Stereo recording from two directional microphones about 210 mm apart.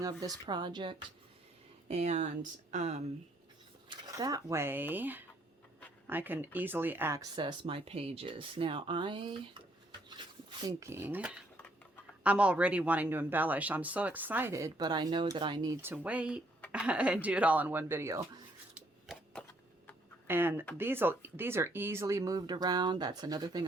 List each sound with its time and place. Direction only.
0.0 s speech: 15° right (ahead or behind)
1.9 s speech: 30° right (ahead or behind)
3.8 s speech: 20° right (ahead or behind)
18.7 s a sound: centre (ahead or behind)
20.2 s speech: 10° right (ahead or behind)